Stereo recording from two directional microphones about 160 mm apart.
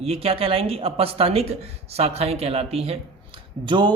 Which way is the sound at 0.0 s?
40° right (ahead or behind).